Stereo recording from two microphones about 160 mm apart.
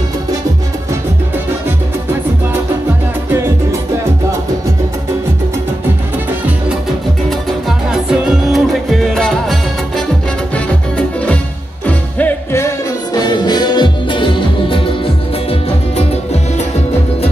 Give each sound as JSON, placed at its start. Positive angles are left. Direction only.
{"t": 7.2, "sound": "music", "side_deg": 0}
{"t": 16.0, "sound": "music", "side_deg": 40}